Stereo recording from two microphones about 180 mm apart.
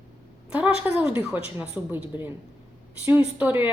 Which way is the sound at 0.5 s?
10° right (ahead or behind).